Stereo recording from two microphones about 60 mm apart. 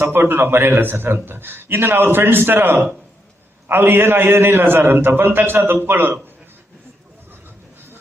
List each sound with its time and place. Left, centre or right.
0.0 s a man's voice: right
7.3 s vehicle: right